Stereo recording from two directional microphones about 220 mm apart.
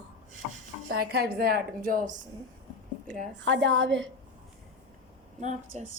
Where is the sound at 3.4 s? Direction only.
55° right (ahead or behind).